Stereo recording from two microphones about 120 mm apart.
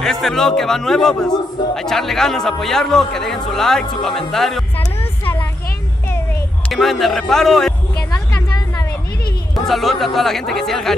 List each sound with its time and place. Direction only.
0.0 s speech: centre (ahead or behind)
4.7 s music: 15° left (ahead or behind)
6.7 s speech: centre (ahead or behind)
8.4 s a sound: 25° left (ahead or behind)
9.7 s speech: centre (ahead or behind)